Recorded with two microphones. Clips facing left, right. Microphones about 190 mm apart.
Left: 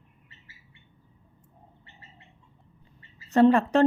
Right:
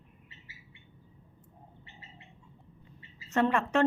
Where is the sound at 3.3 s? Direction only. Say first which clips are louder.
Left 9 dB; 35° left (ahead or behind).